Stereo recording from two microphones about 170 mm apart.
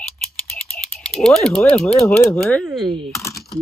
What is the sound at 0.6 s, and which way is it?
Speech, 5° left (ahead or behind).